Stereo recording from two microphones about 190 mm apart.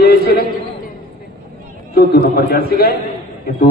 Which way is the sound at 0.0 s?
55° left (ahead or behind).